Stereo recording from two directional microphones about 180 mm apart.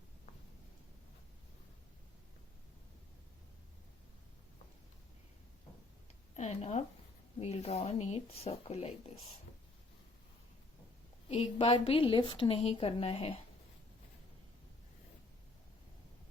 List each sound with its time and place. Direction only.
6.3 s a woman's voice: 40° left (ahead or behind)
11.3 s a woman's voice: 30° left (ahead or behind)